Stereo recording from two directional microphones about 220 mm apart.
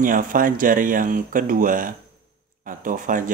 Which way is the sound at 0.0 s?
40° right (ahead or behind).